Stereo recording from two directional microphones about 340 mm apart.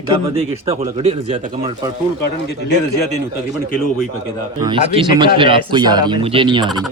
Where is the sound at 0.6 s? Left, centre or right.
Centre.